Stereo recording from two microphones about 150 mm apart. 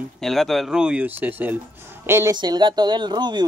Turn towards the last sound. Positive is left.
turn(degrees=-30)  # may be behind; listen again after turning